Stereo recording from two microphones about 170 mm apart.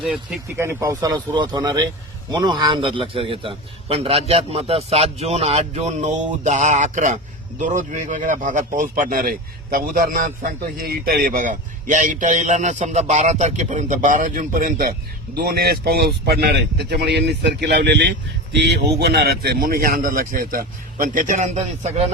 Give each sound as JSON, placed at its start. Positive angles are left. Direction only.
{"t": 0.0, "sound": "a man's voice", "side_deg": -5}
{"t": 16.9, "sound": "a man's voice", "side_deg": -80}